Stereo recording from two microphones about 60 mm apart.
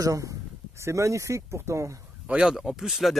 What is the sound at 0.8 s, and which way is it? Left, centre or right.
A man's voice, right.